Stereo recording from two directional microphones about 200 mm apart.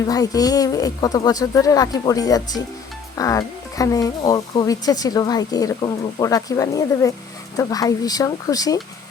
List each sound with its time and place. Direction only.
0.1 s speech: 20° left (ahead or behind)